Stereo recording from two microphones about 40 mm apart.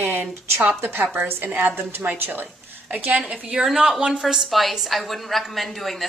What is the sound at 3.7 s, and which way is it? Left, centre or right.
A woman's voice, centre.